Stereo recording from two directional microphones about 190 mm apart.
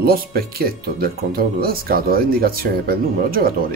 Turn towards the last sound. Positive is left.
turn(degrees=-50)  # may be behind; listen again after turning